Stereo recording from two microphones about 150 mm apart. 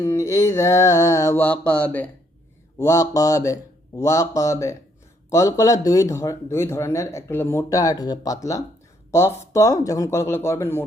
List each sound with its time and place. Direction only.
0.0 s speech: 20° left (ahead or behind)
2.7 s speech: 20° left (ahead or behind)